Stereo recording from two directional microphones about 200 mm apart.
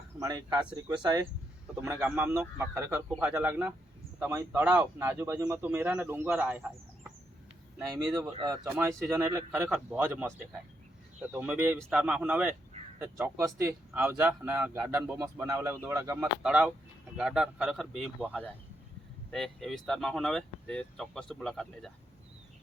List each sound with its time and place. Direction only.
0.2 s speech: 20° right (ahead or behind)
0.5 s speech: 10° right (ahead or behind)
8.7 s speech: 10° right (ahead or behind)
16.4 s speech: 5° right (ahead or behind)